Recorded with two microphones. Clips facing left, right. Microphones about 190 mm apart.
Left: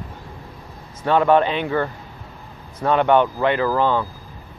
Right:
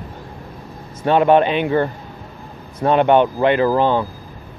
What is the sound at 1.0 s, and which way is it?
Speech, 20° right (ahead or behind).